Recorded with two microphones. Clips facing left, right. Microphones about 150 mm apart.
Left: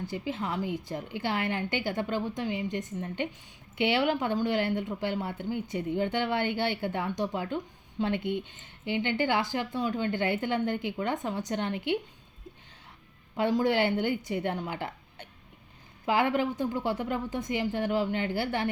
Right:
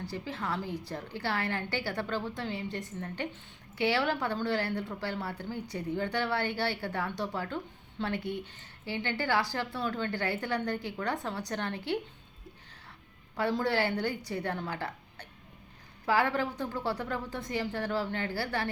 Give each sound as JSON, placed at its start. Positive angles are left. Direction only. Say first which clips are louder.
{"t": 0.1, "sound": "a woman's voice", "louder": "left 2 dB", "side_deg": 20}
{"t": 13.3, "sound": "a woman's voice", "louder": "left 4 dB", "side_deg": 15}